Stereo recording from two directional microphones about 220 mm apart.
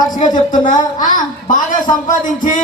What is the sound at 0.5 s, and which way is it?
A man's voice, 35° left (ahead or behind).